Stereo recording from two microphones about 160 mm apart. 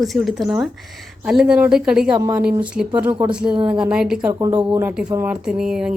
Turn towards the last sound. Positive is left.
turn(degrees=-5)  # may be behind; listen again after turning